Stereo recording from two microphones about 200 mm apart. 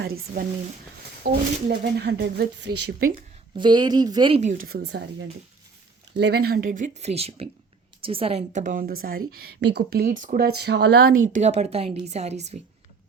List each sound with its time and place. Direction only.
0.0 s a woman's voice: 50° right (ahead or behind)
3.5 s a woman's voice: 20° right (ahead or behind); by 11.3 s 70° right (ahead or behind)
11.3 s speech: 35° right (ahead or behind)